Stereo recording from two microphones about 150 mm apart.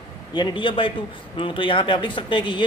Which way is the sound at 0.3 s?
35° left (ahead or behind).